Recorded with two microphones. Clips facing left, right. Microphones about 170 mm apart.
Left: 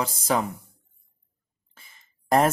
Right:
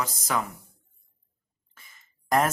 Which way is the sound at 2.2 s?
30° left (ahead or behind).